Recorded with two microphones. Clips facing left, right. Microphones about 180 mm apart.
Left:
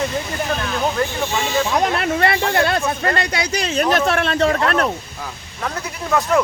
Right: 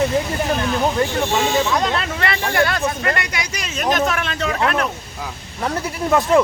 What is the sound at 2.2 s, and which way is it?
Speech, 25° left (ahead or behind).